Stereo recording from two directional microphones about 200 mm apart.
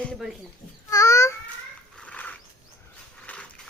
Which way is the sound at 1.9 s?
5° left (ahead or behind).